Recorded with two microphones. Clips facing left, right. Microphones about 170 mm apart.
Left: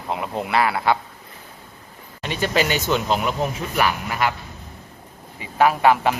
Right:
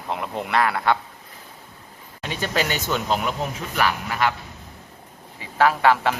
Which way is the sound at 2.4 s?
10° left (ahead or behind).